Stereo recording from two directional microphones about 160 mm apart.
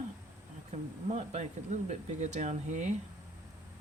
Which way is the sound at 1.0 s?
40° right (ahead or behind).